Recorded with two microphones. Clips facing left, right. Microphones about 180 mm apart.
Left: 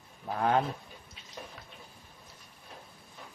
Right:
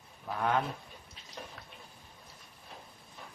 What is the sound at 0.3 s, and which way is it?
Speech, 30° left (ahead or behind).